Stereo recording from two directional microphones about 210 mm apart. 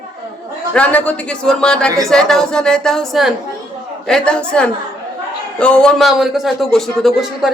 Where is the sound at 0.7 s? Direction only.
5° left (ahead or behind).